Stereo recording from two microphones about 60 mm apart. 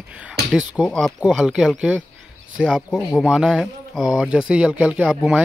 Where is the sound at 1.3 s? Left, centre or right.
Centre.